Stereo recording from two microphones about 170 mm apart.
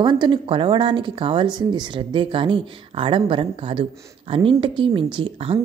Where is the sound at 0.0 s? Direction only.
25° right (ahead or behind).